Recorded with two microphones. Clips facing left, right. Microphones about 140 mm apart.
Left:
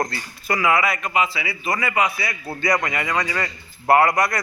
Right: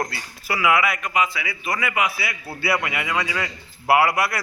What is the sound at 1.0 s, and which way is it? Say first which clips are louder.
Speech: left 1 dB; 30° left (ahead or behind).